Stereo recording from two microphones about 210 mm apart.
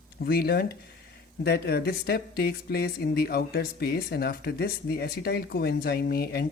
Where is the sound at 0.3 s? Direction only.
50° left (ahead or behind).